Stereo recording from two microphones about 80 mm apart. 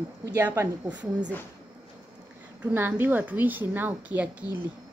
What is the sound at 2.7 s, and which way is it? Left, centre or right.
Speech, right.